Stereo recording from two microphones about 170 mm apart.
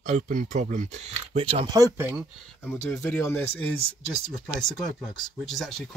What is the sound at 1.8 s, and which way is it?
Speech, 10° right (ahead or behind).